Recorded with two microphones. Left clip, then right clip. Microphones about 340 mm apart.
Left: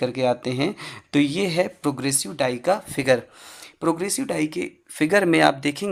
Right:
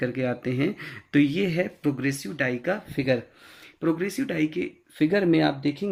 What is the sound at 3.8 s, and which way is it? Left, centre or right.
Speech, centre.